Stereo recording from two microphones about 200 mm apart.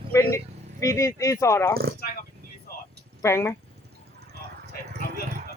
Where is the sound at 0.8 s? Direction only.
15° left (ahead or behind).